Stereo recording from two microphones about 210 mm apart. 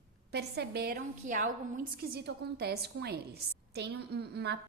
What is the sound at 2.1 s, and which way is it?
A woman's voice, 50° right (ahead or behind).